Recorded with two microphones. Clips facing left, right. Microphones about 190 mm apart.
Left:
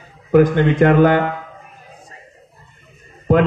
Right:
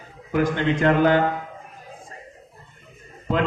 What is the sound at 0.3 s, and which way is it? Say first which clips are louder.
Speech: left 8 dB; 55° left (ahead or behind).